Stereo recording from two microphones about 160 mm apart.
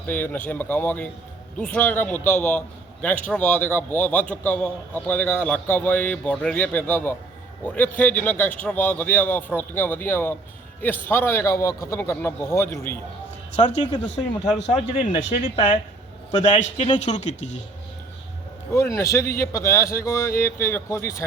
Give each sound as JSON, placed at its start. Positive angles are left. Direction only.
{"t": 0.1, "sound": "a man's voice", "side_deg": 10}
{"t": 14.7, "sound": "a man's voice", "side_deg": 45}
{"t": 18.7, "sound": "a man's voice", "side_deg": 15}